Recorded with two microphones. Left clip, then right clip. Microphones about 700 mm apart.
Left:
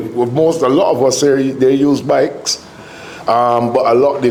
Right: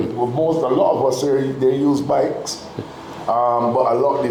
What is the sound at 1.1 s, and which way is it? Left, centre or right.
A man's voice, left.